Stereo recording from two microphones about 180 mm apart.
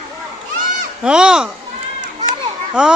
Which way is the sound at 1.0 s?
5° right (ahead or behind).